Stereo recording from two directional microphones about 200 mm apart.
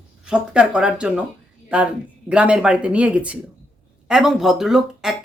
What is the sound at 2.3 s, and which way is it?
Speech, 5° right (ahead or behind).